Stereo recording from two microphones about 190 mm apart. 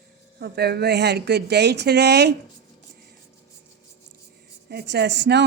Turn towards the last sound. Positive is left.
turn(degrees=-65)  # may be behind; listen again after turning